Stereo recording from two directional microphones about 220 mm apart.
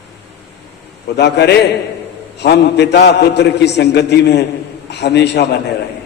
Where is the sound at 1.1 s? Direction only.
50° left (ahead or behind).